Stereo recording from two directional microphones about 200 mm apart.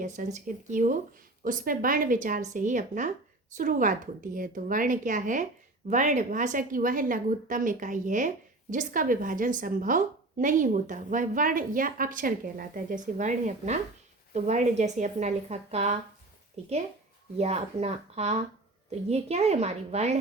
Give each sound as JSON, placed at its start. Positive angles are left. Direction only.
{"t": 0.0, "sound": "a woman's voice", "side_deg": -40}
{"t": 17.3, "sound": "a woman's voice", "side_deg": -30}